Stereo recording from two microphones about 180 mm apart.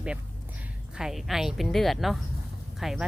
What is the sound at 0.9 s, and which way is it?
A woman's voice, centre (ahead or behind).